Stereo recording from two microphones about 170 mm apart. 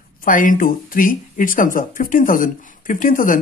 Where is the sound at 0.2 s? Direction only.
50° left (ahead or behind).